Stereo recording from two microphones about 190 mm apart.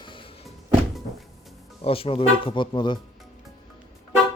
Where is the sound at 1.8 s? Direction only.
30° left (ahead or behind).